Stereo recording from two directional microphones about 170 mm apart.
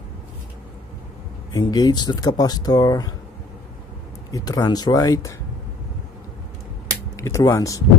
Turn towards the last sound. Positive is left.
turn(degrees=20)  # may be behind; listen again after turning